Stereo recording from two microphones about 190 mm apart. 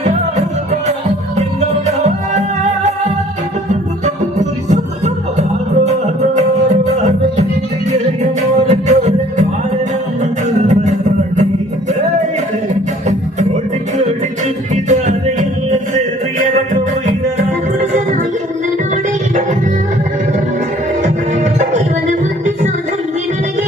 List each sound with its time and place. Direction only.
0.3 s music: 35° right (ahead or behind)
3.7 s music: 40° right (ahead or behind)
14.4 s music: 40° right (ahead or behind)
21.0 s music: 40° right (ahead or behind)